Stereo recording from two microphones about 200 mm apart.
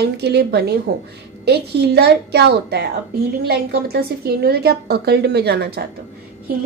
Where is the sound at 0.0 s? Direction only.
55° right (ahead or behind).